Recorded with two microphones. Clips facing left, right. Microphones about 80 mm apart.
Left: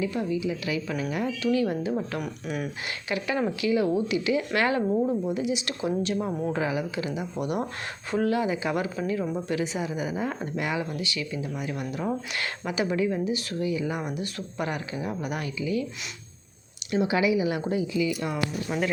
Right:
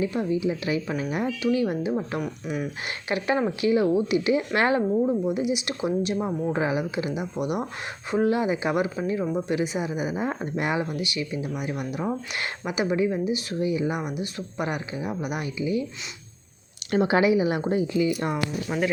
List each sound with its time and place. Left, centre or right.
0.0 s speech: right
3.1 s speech: right; by 7.7 s centre
8.1 s speech: right
14.0 s speech: centre
16.9 s a woman's voice: right
18.7 s speech: centre